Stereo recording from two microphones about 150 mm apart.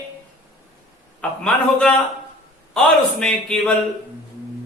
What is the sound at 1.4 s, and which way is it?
A man's voice, 5° left (ahead or behind).